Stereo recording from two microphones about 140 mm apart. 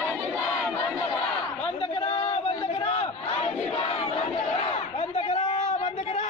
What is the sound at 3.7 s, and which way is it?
Battle cry, 45° left (ahead or behind).